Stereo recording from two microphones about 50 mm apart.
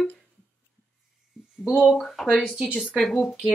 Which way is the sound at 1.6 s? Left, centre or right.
Centre.